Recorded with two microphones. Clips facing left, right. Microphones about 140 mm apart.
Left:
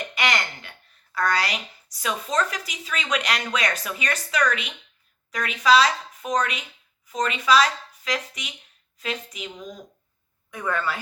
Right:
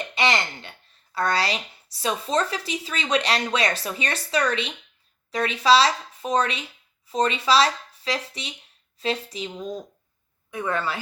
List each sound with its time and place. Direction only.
0.1 s speech: 25° right (ahead or behind)